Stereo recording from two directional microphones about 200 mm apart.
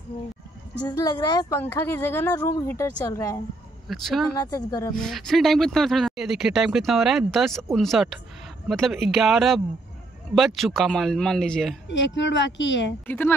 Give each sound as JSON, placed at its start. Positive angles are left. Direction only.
{"t": 0.8, "sound": "a woman's voice", "side_deg": 20}
{"t": 3.9, "sound": "speech", "side_deg": 0}
{"t": 4.4, "sound": "a woman's voice", "side_deg": 20}
{"t": 4.9, "sound": "speech", "side_deg": 0}
{"t": 11.9, "sound": "speech", "side_deg": 65}
{"t": 13.0, "sound": "a woman's voice", "side_deg": 10}